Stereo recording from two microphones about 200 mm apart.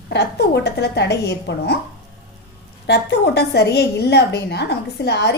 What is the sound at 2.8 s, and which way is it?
A woman's voice, 55° left (ahead or behind).